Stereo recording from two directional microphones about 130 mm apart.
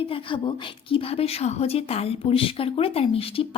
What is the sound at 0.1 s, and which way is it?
A woman's voice, 40° left (ahead or behind).